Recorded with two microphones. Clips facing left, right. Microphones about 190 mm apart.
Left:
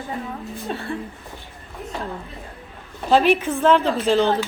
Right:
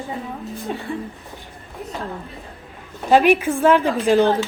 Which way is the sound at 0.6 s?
15° right (ahead or behind).